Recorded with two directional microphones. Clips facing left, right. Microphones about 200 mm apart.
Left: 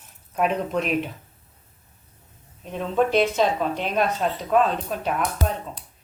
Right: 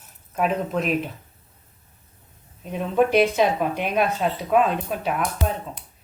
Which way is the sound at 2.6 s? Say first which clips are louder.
Right 2 dB; 10° right (ahead or behind).